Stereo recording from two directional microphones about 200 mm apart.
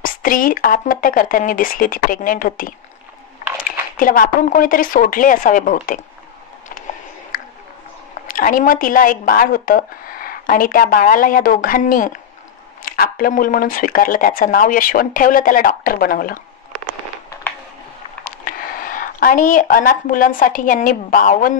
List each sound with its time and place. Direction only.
0.0 s speech: 45° left (ahead or behind)
4.0 s speech: 45° left (ahead or behind)
7.3 s a sound: 45° left (ahead or behind)
8.3 s speech: 45° left (ahead or behind)
17.3 s a sound: 10° left (ahead or behind)
18.2 s speech: 45° left (ahead or behind)